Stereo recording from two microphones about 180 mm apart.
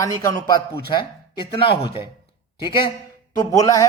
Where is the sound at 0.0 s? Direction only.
20° left (ahead or behind).